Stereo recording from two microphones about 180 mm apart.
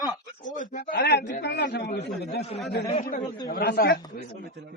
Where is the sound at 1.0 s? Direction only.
70° left (ahead or behind).